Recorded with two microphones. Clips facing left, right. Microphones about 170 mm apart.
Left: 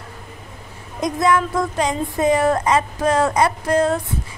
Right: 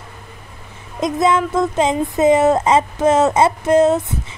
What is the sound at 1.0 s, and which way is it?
Speech, 20° right (ahead or behind).